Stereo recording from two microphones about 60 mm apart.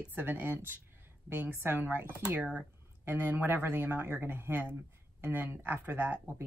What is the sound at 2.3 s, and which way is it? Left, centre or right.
Speech, right.